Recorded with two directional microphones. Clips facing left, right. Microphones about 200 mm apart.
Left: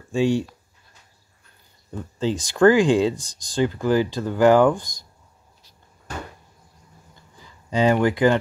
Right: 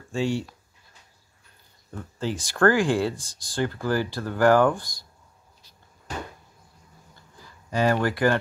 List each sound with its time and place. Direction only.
0.1 s speech: 15° left (ahead or behind)
1.9 s speech: 20° left (ahead or behind)
7.7 s speech: 20° left (ahead or behind)